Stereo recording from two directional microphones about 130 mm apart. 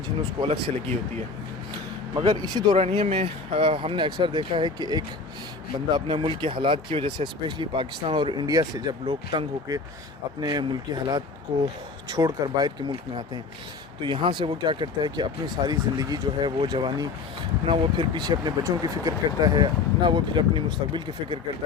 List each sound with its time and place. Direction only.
0.3 s speech: 45° right (ahead or behind)
2.1 s speech: 35° right (ahead or behind)
2.7 s speech: 50° right (ahead or behind)